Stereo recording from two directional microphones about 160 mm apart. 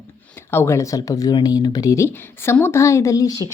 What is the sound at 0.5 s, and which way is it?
Speech, 15° left (ahead or behind).